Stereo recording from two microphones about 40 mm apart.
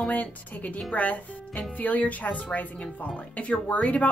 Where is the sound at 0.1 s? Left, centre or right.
Left.